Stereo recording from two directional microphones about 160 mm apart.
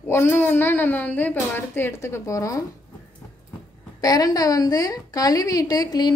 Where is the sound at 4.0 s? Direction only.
25° left (ahead or behind).